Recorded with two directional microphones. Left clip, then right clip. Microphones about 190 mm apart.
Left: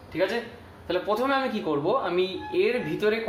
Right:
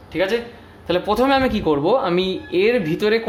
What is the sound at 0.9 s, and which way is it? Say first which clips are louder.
Speech: right 8 dB; 55° right (ahead or behind).